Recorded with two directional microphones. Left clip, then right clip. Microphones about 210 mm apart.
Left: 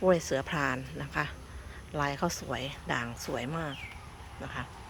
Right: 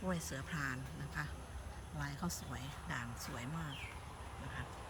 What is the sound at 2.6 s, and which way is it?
Speech, 10° left (ahead or behind).